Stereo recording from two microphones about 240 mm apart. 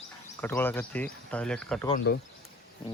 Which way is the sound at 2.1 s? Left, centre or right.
Left.